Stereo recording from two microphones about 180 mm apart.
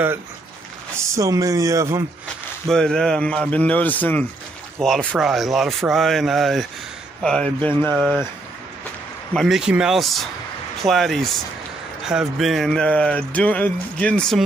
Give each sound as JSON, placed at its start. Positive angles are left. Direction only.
{"t": 0.9, "sound": "speech", "side_deg": -15}
{"t": 2.7, "sound": "a man's voice", "side_deg": 5}
{"t": 9.3, "sound": "speech", "side_deg": 0}